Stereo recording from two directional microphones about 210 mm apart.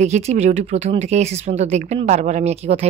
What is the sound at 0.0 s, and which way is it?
A woman's voice, 35° right (ahead or behind).